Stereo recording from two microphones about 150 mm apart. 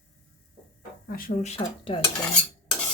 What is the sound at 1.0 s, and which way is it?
Speech, 80° left.